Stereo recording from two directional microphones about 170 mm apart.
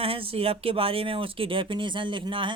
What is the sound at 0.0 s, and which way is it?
Speech, 35° right (ahead or behind).